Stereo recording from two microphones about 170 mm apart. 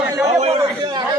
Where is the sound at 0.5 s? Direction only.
25° right (ahead or behind).